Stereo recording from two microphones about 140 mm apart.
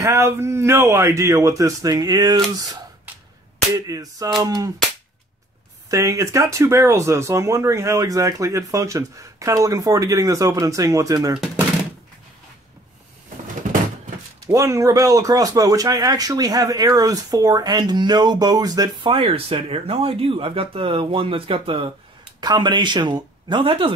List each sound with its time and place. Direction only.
0.0 s speech: 20° right (ahead or behind)
5.9 s speech: 20° right (ahead or behind)
13.6 s a sound: 70° right (ahead or behind)
14.4 s speech: 20° right (ahead or behind)
19.1 s speech: 40° right (ahead or behind)